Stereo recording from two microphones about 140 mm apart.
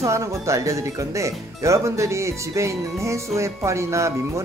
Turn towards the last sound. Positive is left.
turn(degrees=-20)  # may be behind; listen again after turning